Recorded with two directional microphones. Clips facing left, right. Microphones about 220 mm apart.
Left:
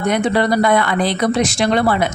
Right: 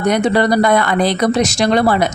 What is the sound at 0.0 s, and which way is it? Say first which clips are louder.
Speech: right 2 dB; 40° right (ahead or behind).